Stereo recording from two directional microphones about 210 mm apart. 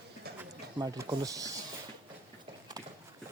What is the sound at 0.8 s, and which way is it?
Speech, 20° right (ahead or behind).